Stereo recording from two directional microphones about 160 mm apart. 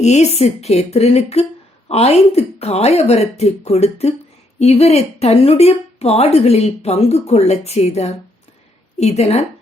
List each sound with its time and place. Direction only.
0.0 s a woman's voice: 45° left (ahead or behind)